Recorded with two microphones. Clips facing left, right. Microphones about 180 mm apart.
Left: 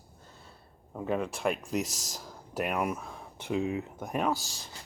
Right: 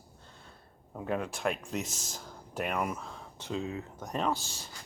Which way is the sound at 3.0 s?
15° left (ahead or behind).